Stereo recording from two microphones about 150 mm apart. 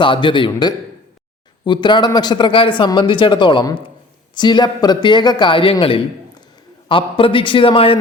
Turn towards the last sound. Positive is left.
turn(degrees=35)  # may be behind; listen again after turning